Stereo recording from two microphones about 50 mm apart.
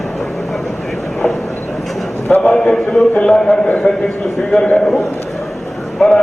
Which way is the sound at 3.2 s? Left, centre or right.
Centre.